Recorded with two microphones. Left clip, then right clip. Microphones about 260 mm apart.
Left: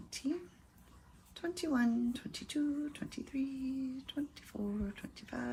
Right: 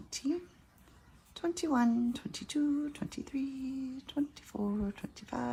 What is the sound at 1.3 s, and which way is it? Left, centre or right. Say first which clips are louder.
Speech: right 4 dB; centre.